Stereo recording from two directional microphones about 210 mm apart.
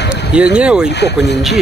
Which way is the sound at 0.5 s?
5° right (ahead or behind).